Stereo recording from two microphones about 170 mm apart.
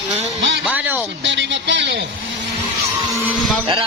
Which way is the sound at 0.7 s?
10° right (ahead or behind).